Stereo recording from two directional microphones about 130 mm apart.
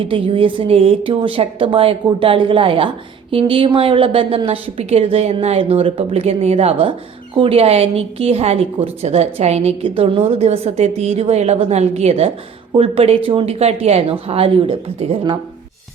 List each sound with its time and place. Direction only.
0.1 s a woman's voice: 45° right (ahead or behind)